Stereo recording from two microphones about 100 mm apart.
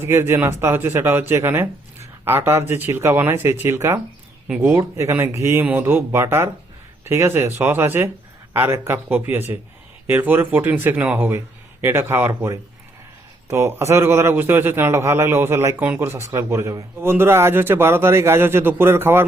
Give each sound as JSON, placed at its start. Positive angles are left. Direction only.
{"t": 0.0, "sound": "a man's voice", "side_deg": -25}
{"t": 13.5, "sound": "a man's voice", "side_deg": -25}